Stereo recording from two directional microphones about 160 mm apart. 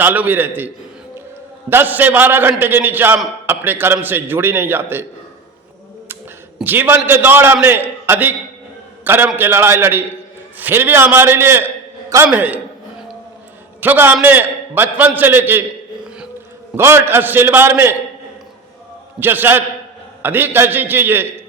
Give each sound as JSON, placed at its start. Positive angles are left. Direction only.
{"t": 0.0, "sound": "a man's voice", "side_deg": -10}
{"t": 1.7, "sound": "a man's voice", "side_deg": -10}
{"t": 6.6, "sound": "a man's voice", "side_deg": -10}
{"t": 13.8, "sound": "a man's voice", "side_deg": -10}
{"t": 16.7, "sound": "a man's voice", "side_deg": -15}
{"t": 19.2, "sound": "a man's voice", "side_deg": -15}